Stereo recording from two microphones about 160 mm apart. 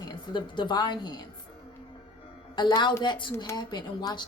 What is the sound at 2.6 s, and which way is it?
A woman's voice, 25° left (ahead or behind).